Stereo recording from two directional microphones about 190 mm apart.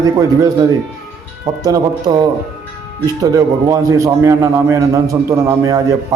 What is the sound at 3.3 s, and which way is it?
A man's voice, 15° right (ahead or behind).